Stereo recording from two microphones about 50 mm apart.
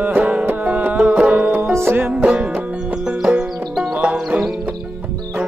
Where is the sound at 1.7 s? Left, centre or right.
Right.